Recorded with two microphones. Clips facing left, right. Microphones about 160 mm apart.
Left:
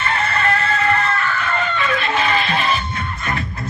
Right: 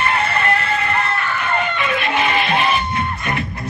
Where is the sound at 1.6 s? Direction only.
15° right (ahead or behind).